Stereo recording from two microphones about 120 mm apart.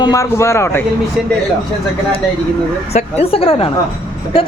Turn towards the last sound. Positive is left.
turn(degrees=50)  # may be behind; listen again after turning